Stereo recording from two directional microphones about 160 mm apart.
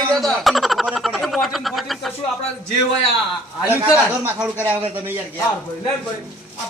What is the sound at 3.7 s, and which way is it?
A man's voice, 15° right (ahead or behind).